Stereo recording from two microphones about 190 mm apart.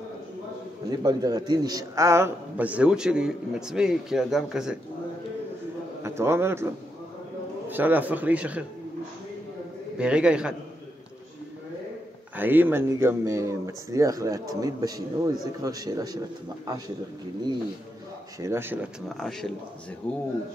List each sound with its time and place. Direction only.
0.8 s a man's voice: 20° right (ahead or behind); by 4.7 s centre (ahead or behind)
6.0 s a man's voice: 15° right (ahead or behind)
7.7 s speech: 10° right (ahead or behind)
9.9 s a man's voice: 5° right (ahead or behind)
12.4 s a man's voice: 10° right (ahead or behind)
18.4 s speech: 15° right (ahead or behind)
19.0 s a man's voice: centre (ahead or behind)